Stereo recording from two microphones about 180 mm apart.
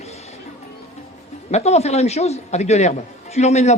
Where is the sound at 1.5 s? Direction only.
35° left (ahead or behind).